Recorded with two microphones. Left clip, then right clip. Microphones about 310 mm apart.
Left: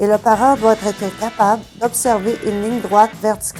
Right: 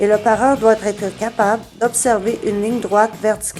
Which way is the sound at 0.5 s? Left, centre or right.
Left.